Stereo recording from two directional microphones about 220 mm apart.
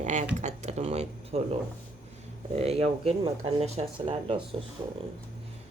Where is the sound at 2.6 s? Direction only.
25° right (ahead or behind).